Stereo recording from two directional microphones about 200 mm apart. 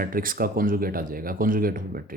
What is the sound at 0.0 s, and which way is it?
Speech, 45° right (ahead or behind).